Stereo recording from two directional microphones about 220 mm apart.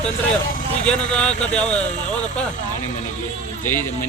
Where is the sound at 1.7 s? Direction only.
35° left (ahead or behind).